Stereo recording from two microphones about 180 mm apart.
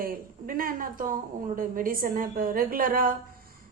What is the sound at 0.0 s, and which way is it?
A woman's voice, 55° right (ahead or behind).